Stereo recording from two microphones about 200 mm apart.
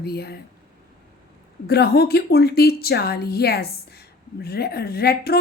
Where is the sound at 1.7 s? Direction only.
50° left (ahead or behind).